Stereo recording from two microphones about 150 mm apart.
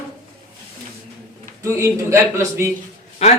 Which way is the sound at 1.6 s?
20° right (ahead or behind).